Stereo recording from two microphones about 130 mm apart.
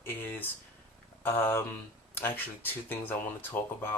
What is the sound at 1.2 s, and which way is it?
Speech, 15° left (ahead or behind).